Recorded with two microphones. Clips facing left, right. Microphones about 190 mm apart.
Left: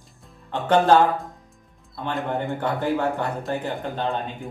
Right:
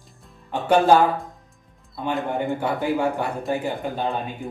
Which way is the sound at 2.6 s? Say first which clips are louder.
Even; 10° right (ahead or behind).